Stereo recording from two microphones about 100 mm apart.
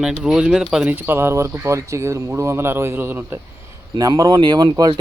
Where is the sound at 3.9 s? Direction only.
40° right (ahead or behind).